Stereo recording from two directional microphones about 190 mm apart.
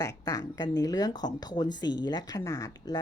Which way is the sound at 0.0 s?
20° left (ahead or behind).